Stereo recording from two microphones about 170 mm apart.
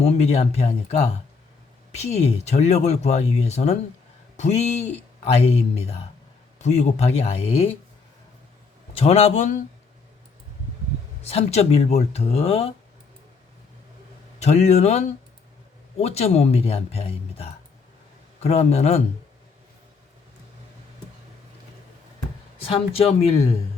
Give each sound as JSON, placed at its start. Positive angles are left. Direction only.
{"t": 0.0, "sound": "speech", "side_deg": 40}
{"t": 9.0, "sound": "speech", "side_deg": 35}
{"t": 11.2, "sound": "speech", "side_deg": 35}
{"t": 14.3, "sound": "speech", "side_deg": 40}
{"t": 22.6, "sound": "speech", "side_deg": 35}